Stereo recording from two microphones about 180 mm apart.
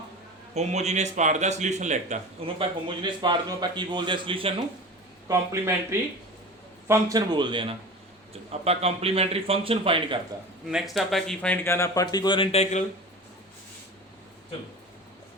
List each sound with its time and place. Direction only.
0.5 s speech: 40° right (ahead or behind)
3.0 s a man's voice: 25° right (ahead or behind)
5.3 s a man's voice: 15° right (ahead or behind); by 10.2 s 30° right (ahead or behind)
10.7 s speech: centre (ahead or behind); by 12.8 s 35° left (ahead or behind)